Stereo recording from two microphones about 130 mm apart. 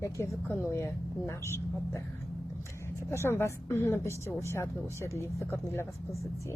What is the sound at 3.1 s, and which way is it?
A woman's voice, 20° left (ahead or behind).